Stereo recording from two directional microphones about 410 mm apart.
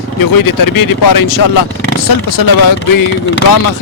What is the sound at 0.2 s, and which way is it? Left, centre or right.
A man's voice, left.